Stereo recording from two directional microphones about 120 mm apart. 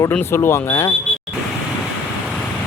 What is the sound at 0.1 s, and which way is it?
Speech, 20° left (ahead or behind).